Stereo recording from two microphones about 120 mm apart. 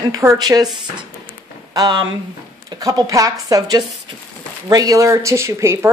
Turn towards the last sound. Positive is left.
turn(degrees=-25)  # may be behind; listen again after turning